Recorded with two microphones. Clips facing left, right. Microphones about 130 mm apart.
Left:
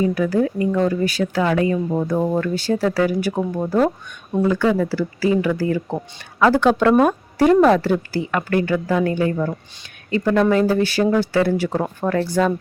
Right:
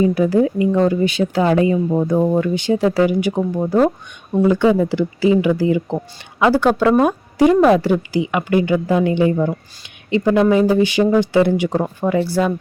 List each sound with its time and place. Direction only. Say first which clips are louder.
0.0 s speech: right 4 dB; 25° right (ahead or behind); by 12.5 s 10° right (ahead or behind)